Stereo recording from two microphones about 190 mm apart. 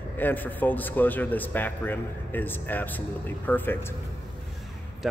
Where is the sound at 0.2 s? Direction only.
10° left (ahead or behind).